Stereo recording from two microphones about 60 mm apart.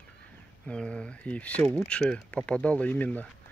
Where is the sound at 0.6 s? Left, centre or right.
Centre.